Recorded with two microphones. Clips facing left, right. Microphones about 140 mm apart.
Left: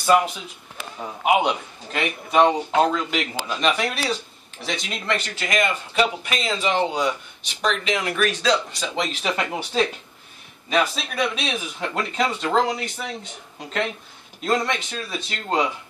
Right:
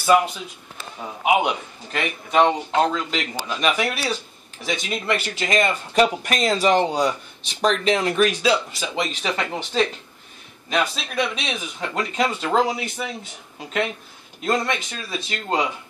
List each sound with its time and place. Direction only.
0.0 s a man's voice: centre (ahead or behind)
5.4 s speech: 25° right (ahead or behind)
5.9 s speech: 45° right (ahead or behind); by 8.3 s 30° right (ahead or behind)
8.3 s a man's voice: 10° right (ahead or behind); by 9.8 s 10° left (ahead or behind)
11.3 s a man's voice: centre (ahead or behind)